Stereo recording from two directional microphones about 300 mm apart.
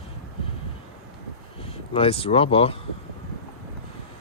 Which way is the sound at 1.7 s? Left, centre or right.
Centre.